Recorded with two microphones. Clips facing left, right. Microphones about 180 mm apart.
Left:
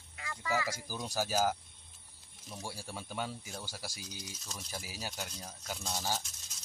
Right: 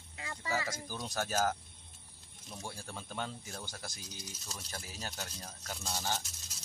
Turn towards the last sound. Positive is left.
turn(degrees=0)  # may be behind; listen again after turning